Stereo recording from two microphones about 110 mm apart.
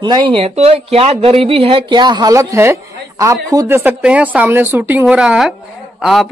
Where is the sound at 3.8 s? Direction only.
15° right (ahead or behind).